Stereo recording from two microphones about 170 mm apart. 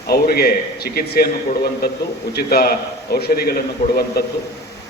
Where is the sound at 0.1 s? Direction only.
65° left (ahead or behind).